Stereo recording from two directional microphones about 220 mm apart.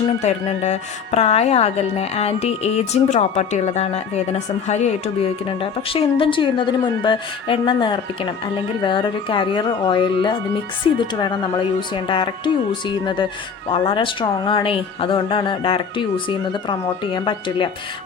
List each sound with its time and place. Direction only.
0.2 s speech: 30° left (ahead or behind)
13.7 s speech: 25° left (ahead or behind)